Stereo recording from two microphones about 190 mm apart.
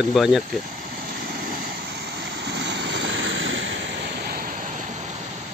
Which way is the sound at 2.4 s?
65° right (ahead or behind).